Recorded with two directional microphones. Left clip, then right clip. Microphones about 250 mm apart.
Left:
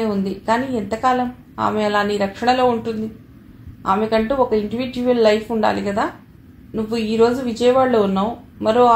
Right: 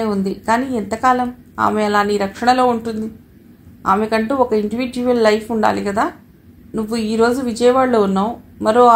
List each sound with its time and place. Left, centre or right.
0.0 s a woman's voice: right